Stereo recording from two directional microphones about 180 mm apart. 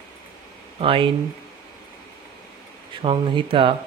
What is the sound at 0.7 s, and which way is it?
Speech, 30° right (ahead or behind).